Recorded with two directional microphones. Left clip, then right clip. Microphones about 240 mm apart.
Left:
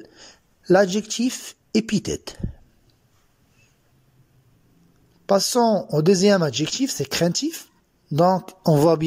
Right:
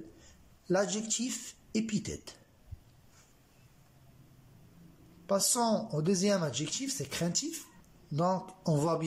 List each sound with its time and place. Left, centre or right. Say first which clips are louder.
0.7 s a woman's voice: left 13 dB; left
5.2 s a woman's voice: left 12 dB; left